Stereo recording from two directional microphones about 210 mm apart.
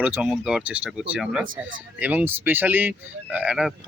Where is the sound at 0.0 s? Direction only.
5° right (ahead or behind).